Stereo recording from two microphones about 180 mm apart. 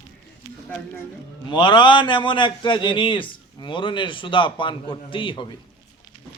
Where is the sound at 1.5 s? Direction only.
25° left (ahead or behind).